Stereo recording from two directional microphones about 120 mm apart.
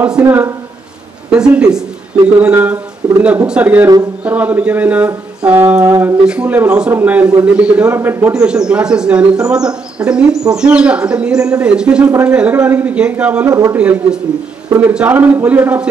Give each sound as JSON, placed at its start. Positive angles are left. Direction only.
{"t": 0.0, "sound": "speech", "side_deg": -10}
{"t": 8.3, "sound": "speech", "side_deg": -5}
{"t": 13.5, "sound": "speech", "side_deg": -30}
{"t": 13.7, "sound": "speech", "side_deg": -10}